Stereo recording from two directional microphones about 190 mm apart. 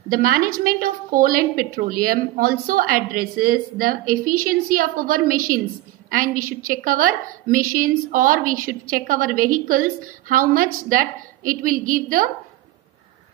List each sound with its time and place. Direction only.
0.1 s a woman's voice: 50° right (ahead or behind)